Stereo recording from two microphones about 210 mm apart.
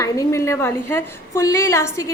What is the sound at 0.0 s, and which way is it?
A woman's voice, 15° left (ahead or behind).